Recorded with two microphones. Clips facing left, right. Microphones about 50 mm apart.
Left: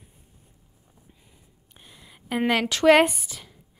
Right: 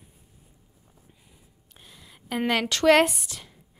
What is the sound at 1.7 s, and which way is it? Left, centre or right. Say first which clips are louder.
A woman's voice: left 1 dB; centre.